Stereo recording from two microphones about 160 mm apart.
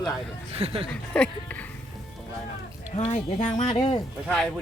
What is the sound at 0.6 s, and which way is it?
Speech, 40° right (ahead or behind).